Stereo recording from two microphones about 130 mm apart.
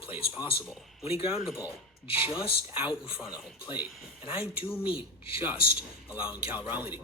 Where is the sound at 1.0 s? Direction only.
50° left (ahead or behind).